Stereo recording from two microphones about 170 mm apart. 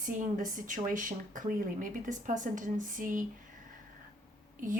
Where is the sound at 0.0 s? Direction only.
50° right (ahead or behind).